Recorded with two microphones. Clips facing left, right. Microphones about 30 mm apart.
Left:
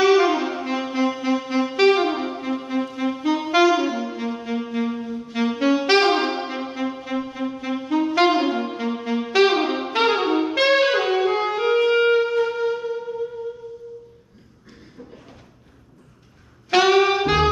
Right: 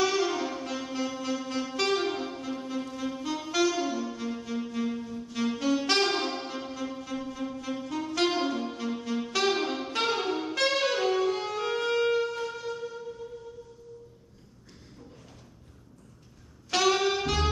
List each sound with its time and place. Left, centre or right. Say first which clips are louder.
0.0 s music: left 10 dB; left
16.7 s saxophone: left 9 dB; left